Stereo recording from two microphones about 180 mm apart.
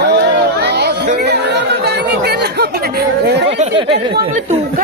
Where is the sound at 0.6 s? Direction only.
70° right (ahead or behind).